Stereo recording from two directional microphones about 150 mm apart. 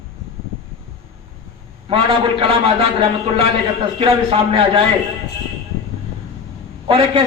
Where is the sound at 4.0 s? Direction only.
35° right (ahead or behind).